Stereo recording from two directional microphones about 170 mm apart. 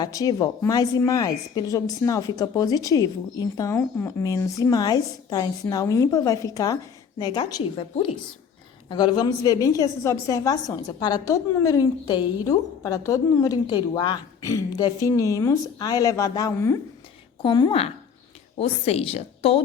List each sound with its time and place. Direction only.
0.0 s a woman's voice: 20° left (ahead or behind)
17.4 s a woman's voice: 25° left (ahead or behind)